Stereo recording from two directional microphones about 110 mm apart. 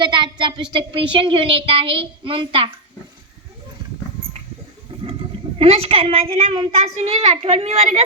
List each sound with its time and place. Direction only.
0.0 s a child's voice: 45° right (ahead or behind)
5.5 s a woman's voice: 60° right (ahead or behind)
6.7 s a woman's voice: 90° right